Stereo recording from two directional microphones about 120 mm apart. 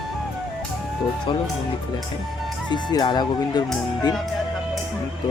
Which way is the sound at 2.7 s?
35° left (ahead or behind).